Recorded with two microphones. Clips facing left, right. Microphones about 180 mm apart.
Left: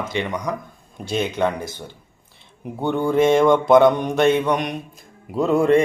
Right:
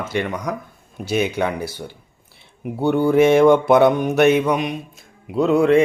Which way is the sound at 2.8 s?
10° right (ahead or behind).